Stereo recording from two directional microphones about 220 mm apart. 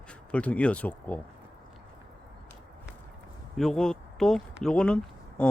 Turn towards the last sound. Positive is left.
turn(degrees=5)  # may be behind; listen again after turning